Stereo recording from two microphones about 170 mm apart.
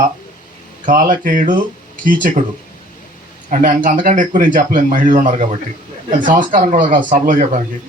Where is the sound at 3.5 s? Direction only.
50° right (ahead or behind).